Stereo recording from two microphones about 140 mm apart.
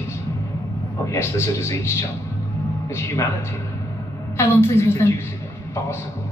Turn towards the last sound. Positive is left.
turn(degrees=20)  # may be behind; listen again after turning